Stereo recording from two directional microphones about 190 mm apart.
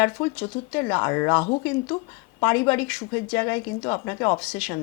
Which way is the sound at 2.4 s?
10° left (ahead or behind).